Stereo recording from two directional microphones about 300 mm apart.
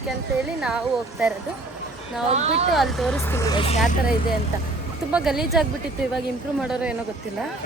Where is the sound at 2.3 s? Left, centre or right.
Right.